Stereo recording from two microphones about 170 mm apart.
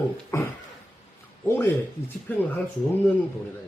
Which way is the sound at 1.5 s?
15° left (ahead or behind).